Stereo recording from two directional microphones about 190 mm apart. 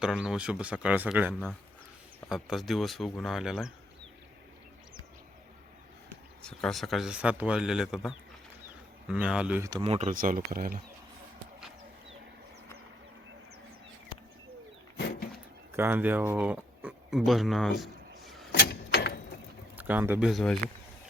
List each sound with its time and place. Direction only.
0.0 s speech: 5° right (ahead or behind)
6.4 s speech: 5° left (ahead or behind)
9.6 s speech: 25° right (ahead or behind)
10.1 s speech: 45° right (ahead or behind)
15.7 s speech: 10° right (ahead or behind)
17.7 s a sound: centre (ahead or behind)
18.7 s a sound: 55° left (ahead or behind)
19.7 s speech: 10° right (ahead or behind)